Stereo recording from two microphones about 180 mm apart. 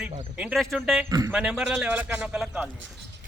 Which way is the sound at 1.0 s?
20° right (ahead or behind).